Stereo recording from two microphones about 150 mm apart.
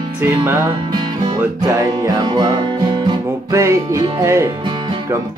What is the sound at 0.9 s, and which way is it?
Music, 30° right (ahead or behind).